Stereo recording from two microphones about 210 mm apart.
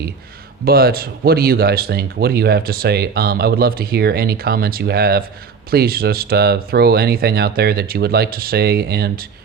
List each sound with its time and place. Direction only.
0.6 s speech: 45° right (ahead or behind)